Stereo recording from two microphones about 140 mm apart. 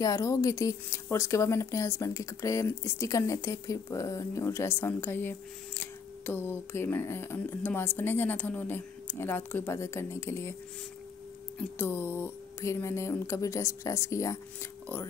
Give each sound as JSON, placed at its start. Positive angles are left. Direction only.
{"t": 0.0, "sound": "speech", "side_deg": 20}
{"t": 11.5, "sound": "speech", "side_deg": 15}